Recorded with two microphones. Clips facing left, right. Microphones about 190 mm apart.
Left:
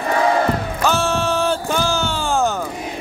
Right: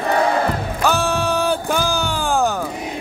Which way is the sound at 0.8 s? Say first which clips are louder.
Even; 15° right (ahead or behind).